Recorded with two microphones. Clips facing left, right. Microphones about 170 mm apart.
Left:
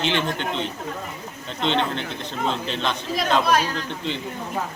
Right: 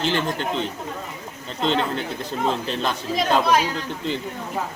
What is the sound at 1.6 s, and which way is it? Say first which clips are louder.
Speech: right 1 dB; 5° right (ahead or behind).